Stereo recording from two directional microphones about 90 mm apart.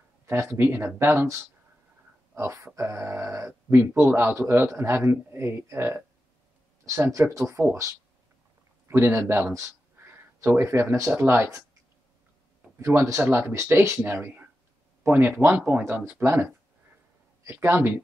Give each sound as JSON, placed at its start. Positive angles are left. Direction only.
{"t": 0.3, "sound": "a man's voice", "side_deg": -30}
{"t": 2.3, "sound": "a man's voice", "side_deg": -30}
{"t": 9.9, "sound": "a sound", "side_deg": -20}
{"t": 10.6, "sound": "a man's voice", "side_deg": -30}
{"t": 12.7, "sound": "a man's voice", "side_deg": -30}
{"t": 17.5, "sound": "a man's voice", "side_deg": -30}